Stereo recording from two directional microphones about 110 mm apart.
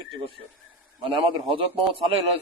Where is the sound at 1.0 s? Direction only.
45° right (ahead or behind).